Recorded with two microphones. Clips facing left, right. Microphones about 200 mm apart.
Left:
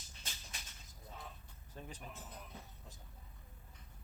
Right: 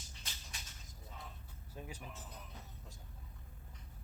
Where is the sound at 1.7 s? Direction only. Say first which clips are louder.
Right 1 dB; 10° right (ahead or behind).